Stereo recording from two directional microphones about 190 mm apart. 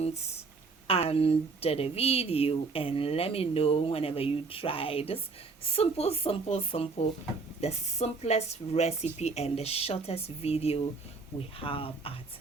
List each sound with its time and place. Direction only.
0.9 s speech: 30° left (ahead or behind)